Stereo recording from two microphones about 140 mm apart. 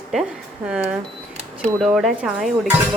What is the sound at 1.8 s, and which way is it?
Speech, centre (ahead or behind).